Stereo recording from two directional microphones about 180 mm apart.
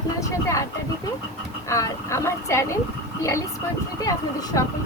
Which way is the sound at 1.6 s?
15° left (ahead or behind).